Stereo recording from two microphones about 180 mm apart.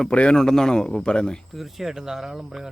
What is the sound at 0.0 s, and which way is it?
Speech, 5° left (ahead or behind).